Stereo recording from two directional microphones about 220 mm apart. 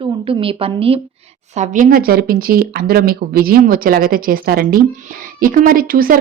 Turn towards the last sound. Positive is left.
turn(degrees=-40)  # may be behind; listen again after turning